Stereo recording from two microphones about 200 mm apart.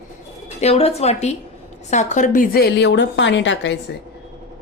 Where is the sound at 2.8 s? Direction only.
65° left (ahead or behind).